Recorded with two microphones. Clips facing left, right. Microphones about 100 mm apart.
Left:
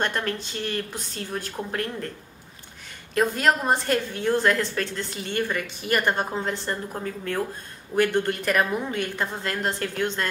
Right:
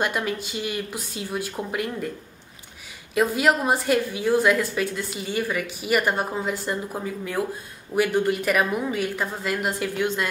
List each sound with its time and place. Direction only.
0.0 s a woman's voice: 10° right (ahead or behind)
3.2 s a woman's voice: 5° right (ahead or behind)